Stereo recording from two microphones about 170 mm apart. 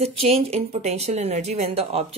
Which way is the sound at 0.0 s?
35° right (ahead or behind).